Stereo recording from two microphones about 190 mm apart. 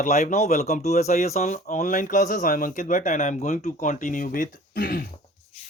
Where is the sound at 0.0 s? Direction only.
40° left (ahead or behind).